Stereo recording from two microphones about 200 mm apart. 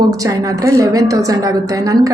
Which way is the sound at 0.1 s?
15° right (ahead or behind).